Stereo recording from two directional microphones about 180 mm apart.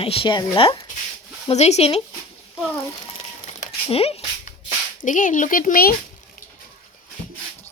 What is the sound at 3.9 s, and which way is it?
Speech, 35° left (ahead or behind).